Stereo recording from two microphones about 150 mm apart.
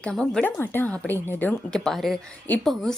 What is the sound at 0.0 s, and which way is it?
A woman's voice, 5° left (ahead or behind).